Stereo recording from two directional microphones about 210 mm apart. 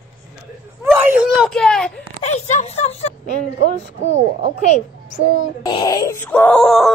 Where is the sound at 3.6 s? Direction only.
60° left (ahead or behind).